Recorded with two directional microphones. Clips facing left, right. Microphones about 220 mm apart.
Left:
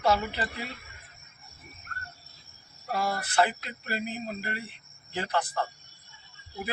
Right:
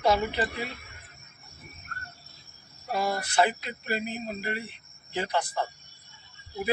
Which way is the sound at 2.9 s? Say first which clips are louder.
Right 1 dB; 15° right (ahead or behind).